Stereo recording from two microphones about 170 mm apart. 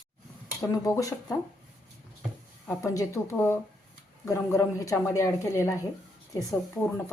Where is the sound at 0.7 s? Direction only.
20° left (ahead or behind).